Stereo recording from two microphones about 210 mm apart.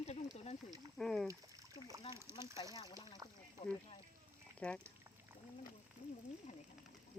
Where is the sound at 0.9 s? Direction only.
Centre (ahead or behind).